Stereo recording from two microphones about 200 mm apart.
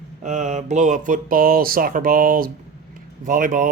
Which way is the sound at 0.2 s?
35° right (ahead or behind).